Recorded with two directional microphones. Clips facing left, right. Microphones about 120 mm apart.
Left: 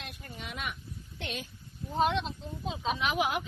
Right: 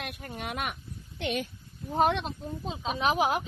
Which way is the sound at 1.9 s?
55° right (ahead or behind).